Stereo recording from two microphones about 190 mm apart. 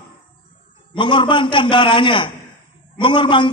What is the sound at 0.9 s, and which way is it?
A man's voice, 25° left (ahead or behind).